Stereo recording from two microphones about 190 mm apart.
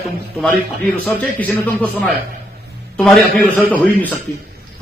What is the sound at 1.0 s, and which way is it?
A man's voice, 10° left (ahead or behind).